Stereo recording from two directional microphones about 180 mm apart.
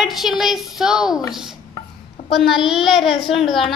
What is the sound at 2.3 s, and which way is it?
Child singing, centre (ahead or behind).